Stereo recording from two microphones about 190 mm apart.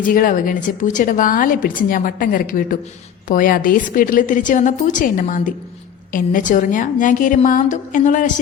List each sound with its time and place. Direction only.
0.0 s a woman's voice: 45° left (ahead or behind)